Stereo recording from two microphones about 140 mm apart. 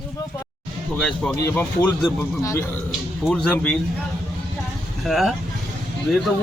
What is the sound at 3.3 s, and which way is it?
Speech, 10° left (ahead or behind).